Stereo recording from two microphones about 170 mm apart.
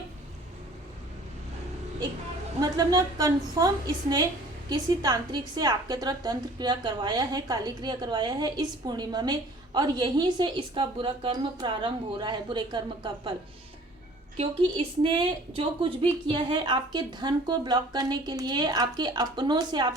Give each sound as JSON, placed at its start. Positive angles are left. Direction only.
{"t": 2.6, "sound": "a woman's voice", "side_deg": -20}
{"t": 14.3, "sound": "a woman's voice", "side_deg": -30}